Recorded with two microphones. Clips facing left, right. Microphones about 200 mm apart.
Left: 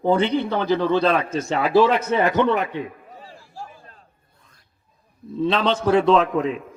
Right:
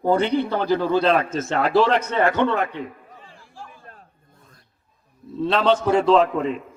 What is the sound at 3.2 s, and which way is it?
Chatter, 40° left (ahead or behind).